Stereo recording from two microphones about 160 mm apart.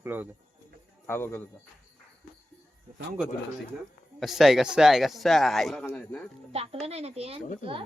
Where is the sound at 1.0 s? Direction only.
15° left (ahead or behind).